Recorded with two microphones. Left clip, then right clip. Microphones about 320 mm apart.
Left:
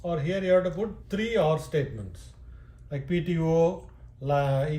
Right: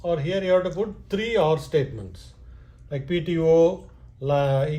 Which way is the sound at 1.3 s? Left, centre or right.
Right.